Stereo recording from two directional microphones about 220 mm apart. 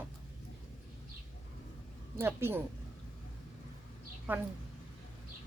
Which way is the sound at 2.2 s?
10° right (ahead or behind).